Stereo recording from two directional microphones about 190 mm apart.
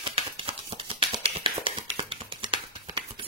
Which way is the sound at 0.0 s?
25° right (ahead or behind).